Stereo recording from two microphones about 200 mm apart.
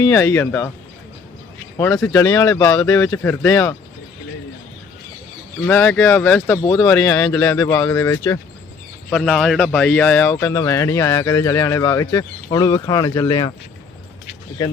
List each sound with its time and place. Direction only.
0.0 s speech: 15° left (ahead or behind)
1.8 s speech: 15° left (ahead or behind)
5.6 s speech: 10° left (ahead or behind)
9.0 s speech: 5° left (ahead or behind); by 13.5 s 20° left (ahead or behind)